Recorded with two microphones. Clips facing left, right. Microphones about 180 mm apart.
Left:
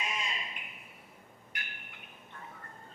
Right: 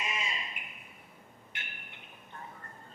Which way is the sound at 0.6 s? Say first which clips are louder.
Even; 10° right (ahead or behind).